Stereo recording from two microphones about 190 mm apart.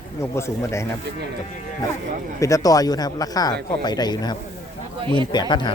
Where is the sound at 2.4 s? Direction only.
20° left (ahead or behind).